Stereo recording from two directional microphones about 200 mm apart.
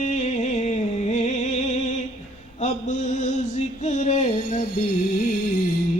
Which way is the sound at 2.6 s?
35° left (ahead or behind).